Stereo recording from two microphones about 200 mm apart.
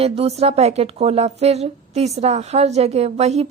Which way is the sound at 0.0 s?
30° right (ahead or behind).